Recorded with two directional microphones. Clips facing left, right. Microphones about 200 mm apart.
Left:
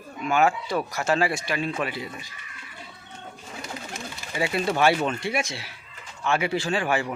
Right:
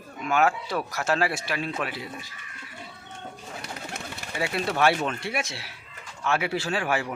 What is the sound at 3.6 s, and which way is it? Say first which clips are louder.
Pigeon: left 3 dB; 60° right (ahead or behind).